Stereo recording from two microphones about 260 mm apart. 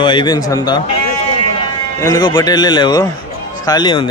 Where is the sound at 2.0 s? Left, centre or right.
Centre.